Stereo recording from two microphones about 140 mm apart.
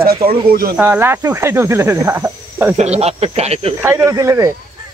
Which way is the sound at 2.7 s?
50° right (ahead or behind).